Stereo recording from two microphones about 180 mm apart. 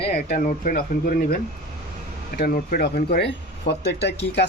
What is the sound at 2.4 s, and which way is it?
Speech, 55° left (ahead or behind).